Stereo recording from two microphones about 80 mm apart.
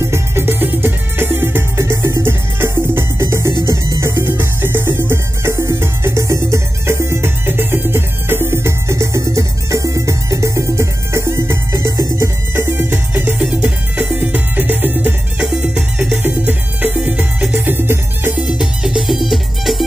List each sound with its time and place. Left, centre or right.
0.0 s music: right
13.4 s music: centre
18.6 s music: centre